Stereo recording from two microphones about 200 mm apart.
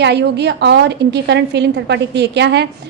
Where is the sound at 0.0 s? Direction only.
55° right (ahead or behind).